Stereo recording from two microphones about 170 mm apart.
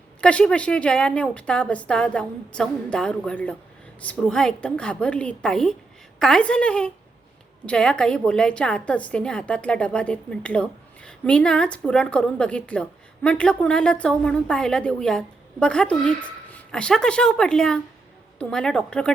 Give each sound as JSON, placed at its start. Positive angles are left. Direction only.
{"t": 0.2, "sound": "a woman's voice", "side_deg": 5}